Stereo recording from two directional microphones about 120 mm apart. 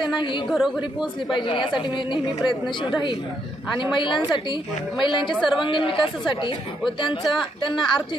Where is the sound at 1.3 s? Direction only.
45° left (ahead or behind).